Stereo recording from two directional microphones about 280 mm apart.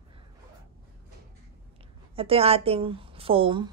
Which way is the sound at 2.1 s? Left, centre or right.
Centre.